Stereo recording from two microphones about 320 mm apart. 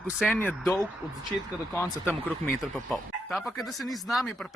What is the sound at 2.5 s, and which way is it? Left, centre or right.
Speech, centre.